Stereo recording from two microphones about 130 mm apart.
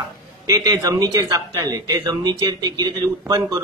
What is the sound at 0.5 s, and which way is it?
A man's voice, 25° right (ahead or behind).